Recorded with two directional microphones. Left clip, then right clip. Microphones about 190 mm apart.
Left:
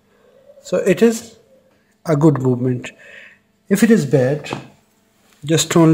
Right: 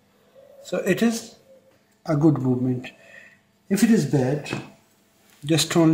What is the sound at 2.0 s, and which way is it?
Speech, 50° left (ahead or behind).